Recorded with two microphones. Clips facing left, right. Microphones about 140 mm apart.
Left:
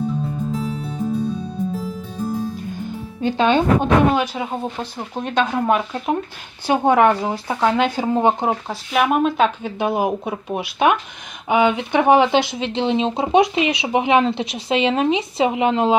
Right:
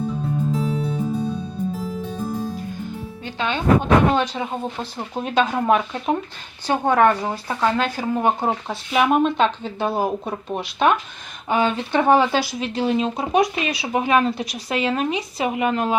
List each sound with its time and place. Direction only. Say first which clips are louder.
0.5 s music: right 2 dB; centre (ahead or behind)
3.2 s speech: left 9 dB; 25° left (ahead or behind)
4.1 s speech: left 1 dB; 10° left (ahead or behind)
4.8 s speech: left 1 dB; centre (ahead or behind)
6.7 s speech: left 2 dB; 15° left (ahead or behind)
8.6 s speech: even; centre (ahead or behind); by 16.0 s 25° left (ahead or behind)